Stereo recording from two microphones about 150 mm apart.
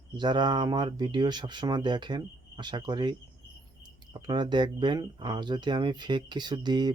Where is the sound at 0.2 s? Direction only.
30° right (ahead or behind).